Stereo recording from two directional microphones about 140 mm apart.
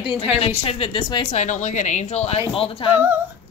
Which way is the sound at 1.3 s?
60° left (ahead or behind).